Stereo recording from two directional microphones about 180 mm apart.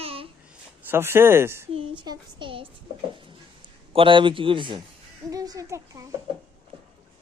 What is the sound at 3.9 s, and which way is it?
Speech, 30° right (ahead or behind).